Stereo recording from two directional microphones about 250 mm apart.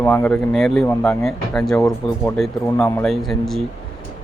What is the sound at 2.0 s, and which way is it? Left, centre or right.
Speech, left.